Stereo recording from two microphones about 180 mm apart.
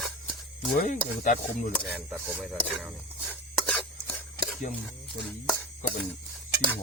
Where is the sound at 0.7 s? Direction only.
45° left (ahead or behind).